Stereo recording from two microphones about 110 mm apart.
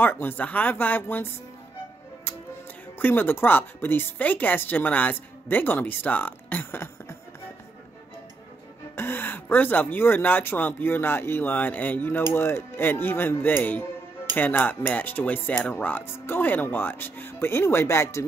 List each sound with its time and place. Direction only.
0.0 s speech: 20° left (ahead or behind)
3.0 s speech: 20° left (ahead or behind)
8.9 s speech: 20° left (ahead or behind)